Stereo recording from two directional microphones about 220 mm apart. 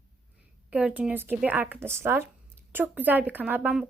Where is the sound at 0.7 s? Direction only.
5° right (ahead or behind).